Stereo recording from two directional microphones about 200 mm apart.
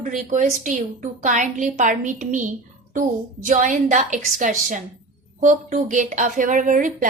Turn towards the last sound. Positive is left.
turn(degrees=-40)  # may be behind; listen again after turning